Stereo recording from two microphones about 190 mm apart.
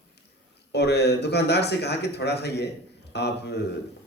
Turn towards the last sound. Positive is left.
turn(degrees=60)  # may be behind; listen again after turning